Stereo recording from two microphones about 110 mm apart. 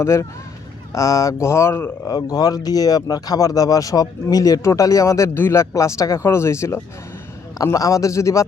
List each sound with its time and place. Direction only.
0.0 s speech: 25° left (ahead or behind)
2.0 s speech: 35° left (ahead or behind)